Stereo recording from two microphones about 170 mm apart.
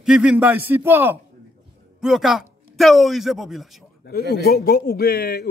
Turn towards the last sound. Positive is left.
turn(degrees=65)  # may be behind; listen again after turning